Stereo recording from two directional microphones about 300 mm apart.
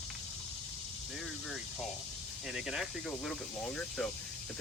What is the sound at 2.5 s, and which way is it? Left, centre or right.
Speech, centre.